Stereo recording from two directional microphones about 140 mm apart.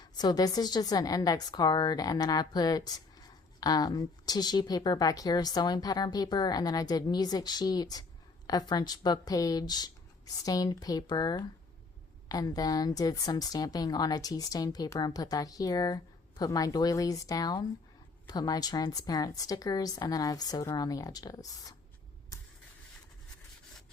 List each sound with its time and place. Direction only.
0.0 s a woman's voice: 30° left (ahead or behind)